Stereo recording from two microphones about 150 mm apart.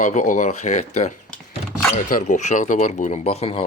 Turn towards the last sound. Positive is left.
turn(degrees=45)  # may be behind; listen again after turning